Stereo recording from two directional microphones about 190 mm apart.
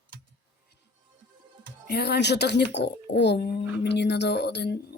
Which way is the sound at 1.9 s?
60° left (ahead or behind).